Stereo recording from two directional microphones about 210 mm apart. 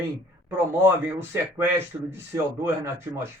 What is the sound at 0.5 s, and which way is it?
A man's voice, 10° right (ahead or behind).